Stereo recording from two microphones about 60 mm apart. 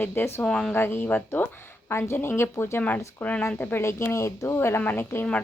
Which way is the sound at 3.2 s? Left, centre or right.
Left.